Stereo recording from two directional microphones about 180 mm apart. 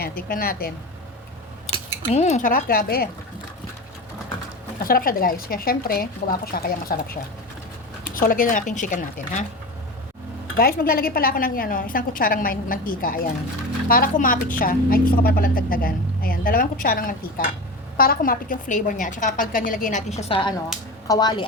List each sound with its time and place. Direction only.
0.0 s a woman's voice: 55° left (ahead or behind)
2.1 s a woman's voice: 40° left (ahead or behind); by 3.1 s 55° left (ahead or behind)
4.9 s a woman's voice: 55° left (ahead or behind)
10.6 s a woman's voice: 55° left (ahead or behind); by 21.4 s 20° left (ahead or behind)